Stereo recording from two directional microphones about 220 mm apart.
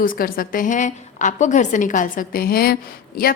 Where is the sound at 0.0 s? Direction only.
40° left (ahead or behind).